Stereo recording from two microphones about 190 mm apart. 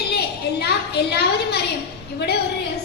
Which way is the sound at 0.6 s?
60° left (ahead or behind).